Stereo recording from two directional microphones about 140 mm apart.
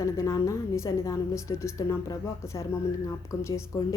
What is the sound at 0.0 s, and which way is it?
A woman's voice, 20° left (ahead or behind).